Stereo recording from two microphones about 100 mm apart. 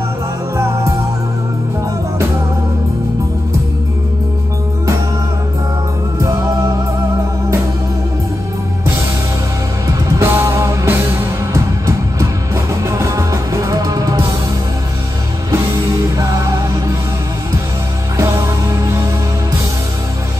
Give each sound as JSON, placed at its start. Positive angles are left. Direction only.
{"t": 0.6, "sound": "music", "side_deg": -30}
{"t": 6.1, "sound": "music", "side_deg": -35}
{"t": 9.8, "sound": "music", "side_deg": -35}
{"t": 15.5, "sound": "music", "side_deg": -35}
{"t": 18.1, "sound": "music", "side_deg": -30}